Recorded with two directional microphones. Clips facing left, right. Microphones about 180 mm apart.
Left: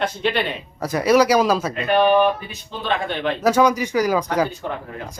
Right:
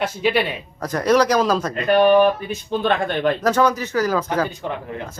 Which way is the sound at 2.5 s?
50° right (ahead or behind).